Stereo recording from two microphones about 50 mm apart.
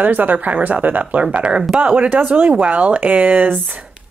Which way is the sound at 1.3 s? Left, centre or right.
Right.